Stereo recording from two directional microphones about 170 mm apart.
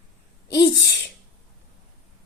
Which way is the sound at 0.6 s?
75° left (ahead or behind).